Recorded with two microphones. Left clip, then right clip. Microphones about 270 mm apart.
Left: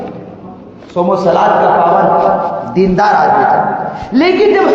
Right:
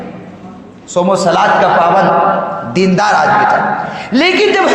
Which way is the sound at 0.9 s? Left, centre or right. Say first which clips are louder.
Even; right.